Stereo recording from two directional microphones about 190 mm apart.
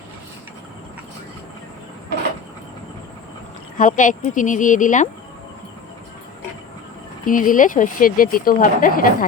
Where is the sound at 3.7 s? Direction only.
45° left (ahead or behind).